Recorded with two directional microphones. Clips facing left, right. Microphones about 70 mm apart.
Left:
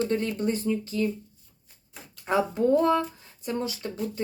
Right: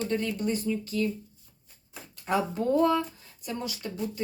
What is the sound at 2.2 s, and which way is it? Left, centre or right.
Speech, left.